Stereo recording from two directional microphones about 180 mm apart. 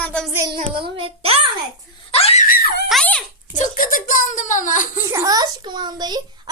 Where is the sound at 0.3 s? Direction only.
25° right (ahead or behind).